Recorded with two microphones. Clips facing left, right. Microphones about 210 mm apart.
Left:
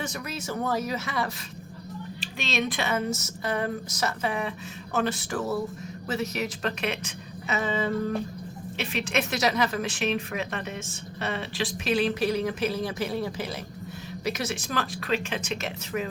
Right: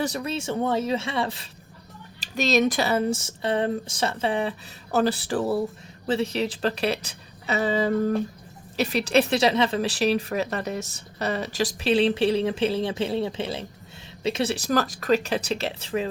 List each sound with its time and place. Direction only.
0.0 s speech: 30° right (ahead or behind)
2.2 s a woman's voice: 40° right (ahead or behind)